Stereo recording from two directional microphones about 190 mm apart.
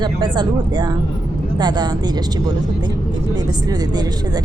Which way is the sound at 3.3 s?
20° right (ahead or behind).